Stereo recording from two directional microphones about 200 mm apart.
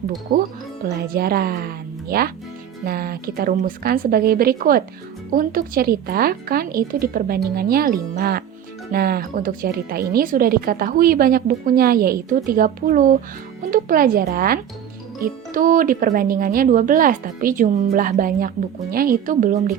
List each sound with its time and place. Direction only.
0.3 s speech: 45° right (ahead or behind)